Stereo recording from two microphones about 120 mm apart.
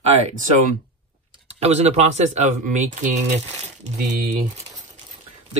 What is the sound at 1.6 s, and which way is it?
Speech, 65° right (ahead or behind).